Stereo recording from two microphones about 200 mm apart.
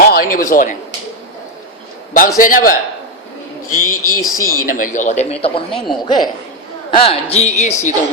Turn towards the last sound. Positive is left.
turn(degrees=35)  # may be behind; listen again after turning